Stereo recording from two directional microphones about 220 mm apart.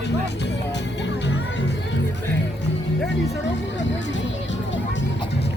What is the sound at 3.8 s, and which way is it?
Music, 55° left (ahead or behind).